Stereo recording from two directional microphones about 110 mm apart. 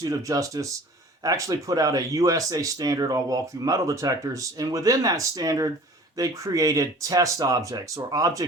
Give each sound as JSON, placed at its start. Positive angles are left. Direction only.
{"t": 0.0, "sound": "speech", "side_deg": -30}